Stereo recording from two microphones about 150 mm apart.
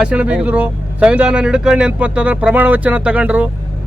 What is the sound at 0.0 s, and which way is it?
Speech, 5° right (ahead or behind).